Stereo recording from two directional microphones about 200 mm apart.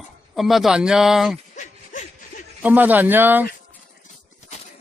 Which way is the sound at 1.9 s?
40° left (ahead or behind).